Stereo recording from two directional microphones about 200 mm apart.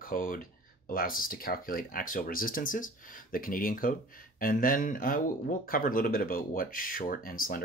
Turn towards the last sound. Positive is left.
turn(degrees=45)  # may be behind; listen again after turning